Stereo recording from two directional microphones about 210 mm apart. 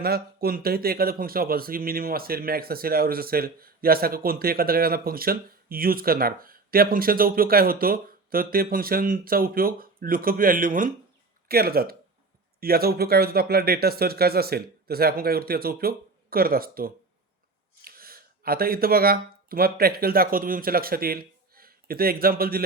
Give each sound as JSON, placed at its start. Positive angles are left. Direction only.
{"t": 0.0, "sound": "speech", "side_deg": -45}